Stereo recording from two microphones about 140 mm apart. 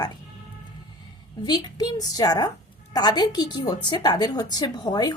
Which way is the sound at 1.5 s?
30° left (ahead or behind).